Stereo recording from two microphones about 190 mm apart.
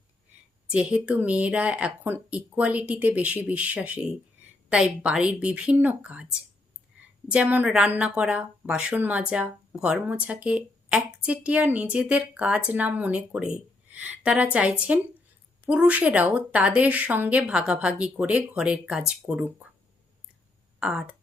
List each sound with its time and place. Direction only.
0.7 s a woman's voice: 5° right (ahead or behind)
7.3 s speech: 10° right (ahead or behind)
20.7 s speech: 5° right (ahead or behind)